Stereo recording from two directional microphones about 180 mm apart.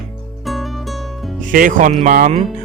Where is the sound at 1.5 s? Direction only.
45° right (ahead or behind).